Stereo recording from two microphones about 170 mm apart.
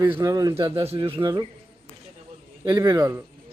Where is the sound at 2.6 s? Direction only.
25° right (ahead or behind).